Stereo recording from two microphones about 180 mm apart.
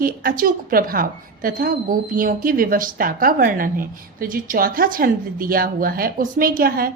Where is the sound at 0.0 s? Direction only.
50° right (ahead or behind).